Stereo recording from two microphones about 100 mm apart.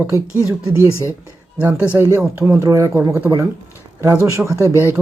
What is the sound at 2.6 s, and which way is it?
A woman's voice, 30° right (ahead or behind).